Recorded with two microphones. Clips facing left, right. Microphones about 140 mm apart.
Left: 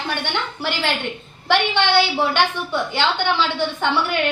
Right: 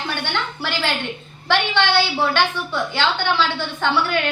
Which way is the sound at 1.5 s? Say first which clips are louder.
Left 1 dB; 15° left (ahead or behind).